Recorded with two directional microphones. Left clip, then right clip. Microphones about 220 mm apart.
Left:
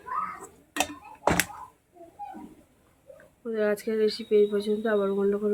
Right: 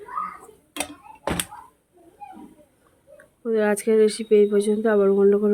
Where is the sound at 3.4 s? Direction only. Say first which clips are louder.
Right 6 dB; 45° right (ahead or behind).